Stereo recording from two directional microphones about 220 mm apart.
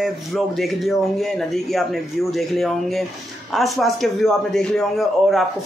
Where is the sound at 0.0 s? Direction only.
Centre (ahead or behind).